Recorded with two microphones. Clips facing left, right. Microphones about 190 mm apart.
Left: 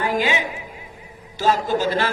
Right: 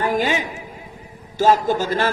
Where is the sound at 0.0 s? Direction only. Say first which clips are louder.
Right 1 dB; 45° right (ahead or behind).